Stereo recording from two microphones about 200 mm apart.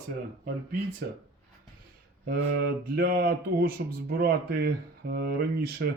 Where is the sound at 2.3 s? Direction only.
50° right (ahead or behind).